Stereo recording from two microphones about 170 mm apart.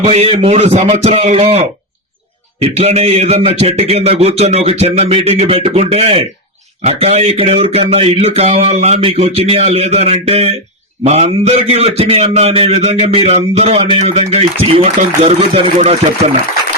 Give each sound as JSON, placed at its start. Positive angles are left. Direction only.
{"t": 0.0, "sound": "a man's voice", "side_deg": -40}